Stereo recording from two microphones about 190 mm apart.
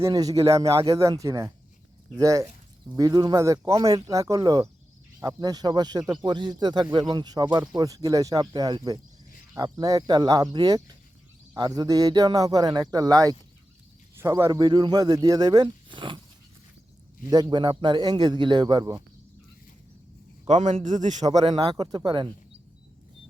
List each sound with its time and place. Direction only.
0.0 s speech: 20° right (ahead or behind)
17.2 s speech: 20° right (ahead or behind)
20.5 s a man's voice: 35° right (ahead or behind)
21.5 s speech: 20° right (ahead or behind)